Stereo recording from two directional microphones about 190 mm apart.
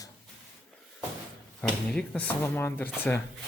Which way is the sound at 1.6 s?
5° left (ahead or behind).